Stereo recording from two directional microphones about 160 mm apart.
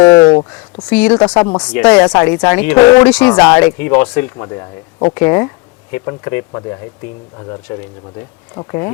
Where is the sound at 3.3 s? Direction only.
25° left (ahead or behind).